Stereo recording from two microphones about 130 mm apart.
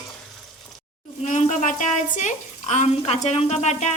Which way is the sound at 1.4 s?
75° left (ahead or behind).